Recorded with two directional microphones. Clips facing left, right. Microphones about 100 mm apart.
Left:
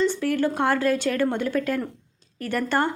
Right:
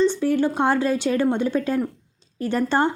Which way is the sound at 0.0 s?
20° right (ahead or behind).